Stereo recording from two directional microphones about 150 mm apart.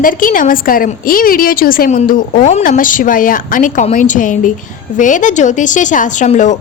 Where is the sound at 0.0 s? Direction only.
65° left (ahead or behind).